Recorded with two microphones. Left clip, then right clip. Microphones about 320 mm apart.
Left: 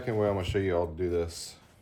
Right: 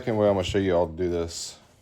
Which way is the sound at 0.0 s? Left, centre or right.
Right.